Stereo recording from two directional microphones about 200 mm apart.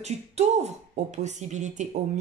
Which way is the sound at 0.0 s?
35° right (ahead or behind).